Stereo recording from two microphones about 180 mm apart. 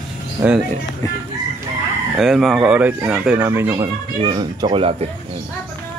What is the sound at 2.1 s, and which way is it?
Speech, centre (ahead or behind).